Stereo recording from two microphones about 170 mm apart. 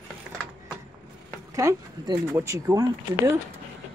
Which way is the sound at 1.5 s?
20° right (ahead or behind).